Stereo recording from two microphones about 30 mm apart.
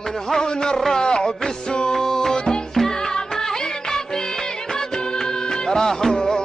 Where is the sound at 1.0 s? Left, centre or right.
Left.